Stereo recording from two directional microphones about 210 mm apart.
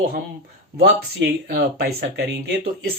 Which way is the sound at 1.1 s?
45° right (ahead or behind).